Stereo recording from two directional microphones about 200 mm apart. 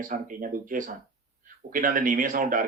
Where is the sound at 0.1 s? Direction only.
45° right (ahead or behind).